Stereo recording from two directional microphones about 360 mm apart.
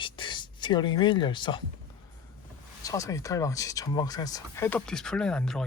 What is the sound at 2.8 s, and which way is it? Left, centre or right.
Speech, centre.